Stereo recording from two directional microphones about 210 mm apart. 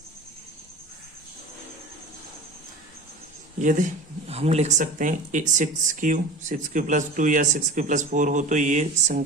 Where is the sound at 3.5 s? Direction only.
40° right (ahead or behind).